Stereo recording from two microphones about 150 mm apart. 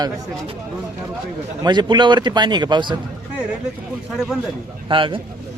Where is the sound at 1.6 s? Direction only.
30° right (ahead or behind).